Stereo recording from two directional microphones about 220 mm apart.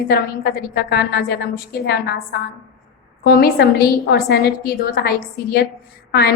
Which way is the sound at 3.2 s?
45° left (ahead or behind).